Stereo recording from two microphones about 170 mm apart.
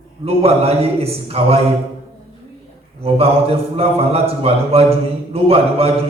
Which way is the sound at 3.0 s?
35° right (ahead or behind).